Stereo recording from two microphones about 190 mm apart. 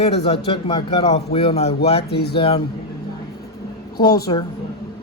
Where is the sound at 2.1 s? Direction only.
60° left (ahead or behind).